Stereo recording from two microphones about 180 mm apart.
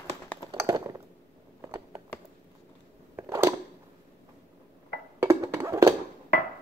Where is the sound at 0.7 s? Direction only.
20° right (ahead or behind).